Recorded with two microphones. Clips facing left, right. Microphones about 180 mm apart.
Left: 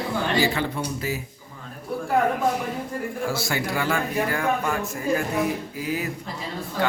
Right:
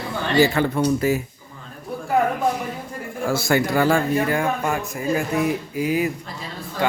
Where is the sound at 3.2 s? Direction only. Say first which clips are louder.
Right 9 dB; 50° right (ahead or behind).